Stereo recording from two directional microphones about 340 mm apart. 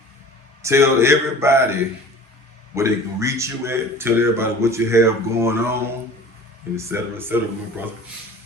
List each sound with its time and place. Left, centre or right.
0.6 s a man's voice: centre